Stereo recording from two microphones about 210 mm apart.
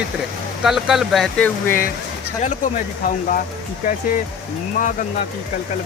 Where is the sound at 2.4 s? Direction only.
40° left (ahead or behind).